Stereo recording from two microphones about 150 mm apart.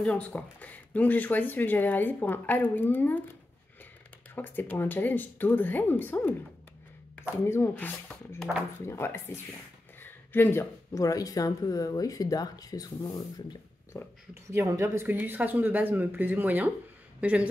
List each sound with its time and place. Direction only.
0.0 s speech: 5° left (ahead or behind)
4.4 s speech: 10° left (ahead or behind)
7.4 s speech: 15° left (ahead or behind)
13.9 s speech: 15° left (ahead or behind)
14.5 s speech: 20° right (ahead or behind)